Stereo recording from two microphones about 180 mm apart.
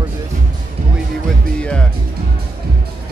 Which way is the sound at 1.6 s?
5° left (ahead or behind).